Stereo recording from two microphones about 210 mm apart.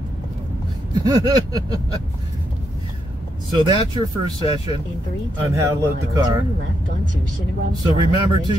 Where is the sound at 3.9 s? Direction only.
20° right (ahead or behind).